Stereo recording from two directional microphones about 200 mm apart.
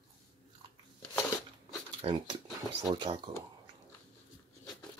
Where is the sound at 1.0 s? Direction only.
15° left (ahead or behind).